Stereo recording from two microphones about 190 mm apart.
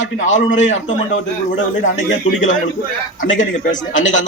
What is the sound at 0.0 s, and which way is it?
Speech, 40° left (ahead or behind).